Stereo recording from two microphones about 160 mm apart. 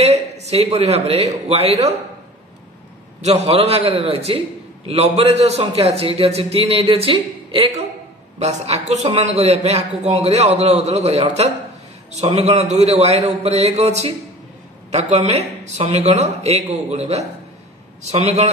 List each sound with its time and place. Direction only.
0.0 s a man's voice: 40° right (ahead or behind)
3.2 s a man's voice: 40° right (ahead or behind)